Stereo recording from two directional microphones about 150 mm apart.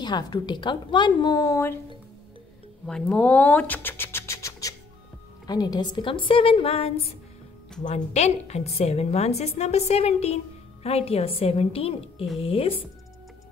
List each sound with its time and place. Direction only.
0.0 s a woman's voice: 30° left (ahead or behind)
2.9 s a sound: 5° left (ahead or behind)
5.5 s a woman's voice: 25° left (ahead or behind)